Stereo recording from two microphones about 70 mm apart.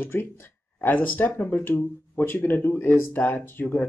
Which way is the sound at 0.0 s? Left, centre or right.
Left.